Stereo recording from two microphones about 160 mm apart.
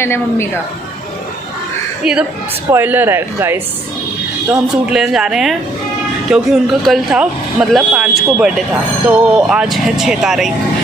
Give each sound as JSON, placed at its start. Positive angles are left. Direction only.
{"t": 0.0, "sound": "a woman's voice", "side_deg": 15}
{"t": 2.7, "sound": "speech", "side_deg": -10}